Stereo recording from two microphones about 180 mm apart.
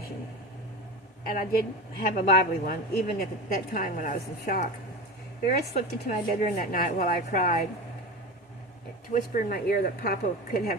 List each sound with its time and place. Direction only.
1.3 s a woman's voice: 50° left (ahead or behind)
5.7 s a woman's voice: 40° left (ahead or behind)
9.1 s a woman's voice: 45° left (ahead or behind)